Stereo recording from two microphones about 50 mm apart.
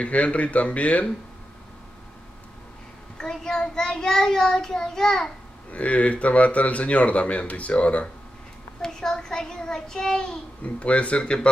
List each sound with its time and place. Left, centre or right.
0.0 s speech: left
3.2 s a child's voice: centre
5.7 s speech: left
8.8 s a child's voice: centre
10.6 s speech: left